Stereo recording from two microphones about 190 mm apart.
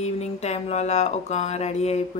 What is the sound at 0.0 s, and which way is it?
Speech, 35° left (ahead or behind).